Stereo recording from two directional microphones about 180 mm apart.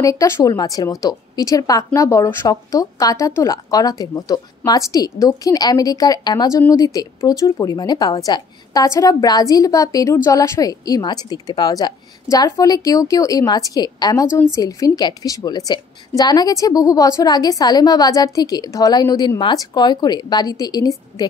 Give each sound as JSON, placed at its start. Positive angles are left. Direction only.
{"t": 0.0, "sound": "speech", "side_deg": 20}